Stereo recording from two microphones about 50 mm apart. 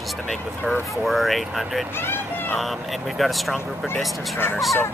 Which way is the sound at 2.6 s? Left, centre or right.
Centre.